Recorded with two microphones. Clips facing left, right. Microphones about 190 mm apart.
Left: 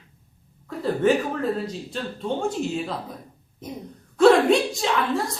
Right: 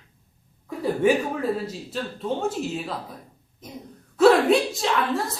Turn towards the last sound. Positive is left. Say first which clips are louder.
# even
turn(degrees=0)  # may be behind; listen again after turning